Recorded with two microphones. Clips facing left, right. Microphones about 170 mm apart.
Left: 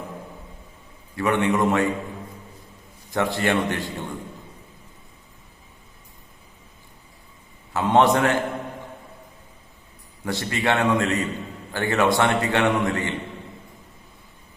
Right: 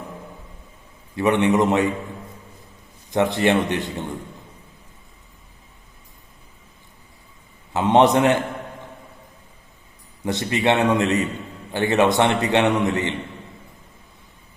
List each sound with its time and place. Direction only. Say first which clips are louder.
1.1 s a man's voice: right 3 dB; 20° right (ahead or behind)
3.1 s a man's voice: right 4 dB; 20° right (ahead or behind)
7.7 s a man's voice: right 2 dB; 20° right (ahead or behind)
10.2 s a man's voice: right 4 dB; 20° right (ahead or behind)